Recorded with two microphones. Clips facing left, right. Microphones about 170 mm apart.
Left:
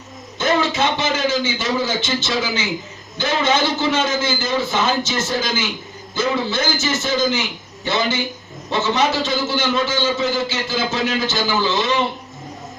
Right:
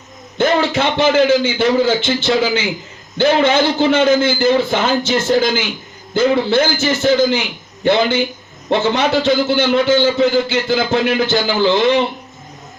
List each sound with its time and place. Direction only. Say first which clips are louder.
0.3 s a man's voice: right 4 dB; 60° right (ahead or behind)